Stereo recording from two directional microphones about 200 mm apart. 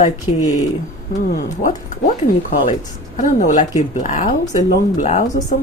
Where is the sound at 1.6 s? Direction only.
40° left (ahead or behind).